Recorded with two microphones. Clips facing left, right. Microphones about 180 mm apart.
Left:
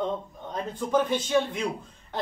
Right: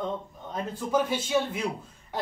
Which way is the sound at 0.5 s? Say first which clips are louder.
Left 1 dB; 5° right (ahead or behind).